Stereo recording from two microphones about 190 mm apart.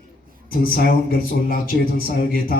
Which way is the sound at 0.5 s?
50° left (ahead or behind).